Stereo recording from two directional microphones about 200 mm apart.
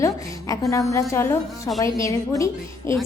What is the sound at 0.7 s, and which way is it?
A woman's voice, 15° left (ahead or behind).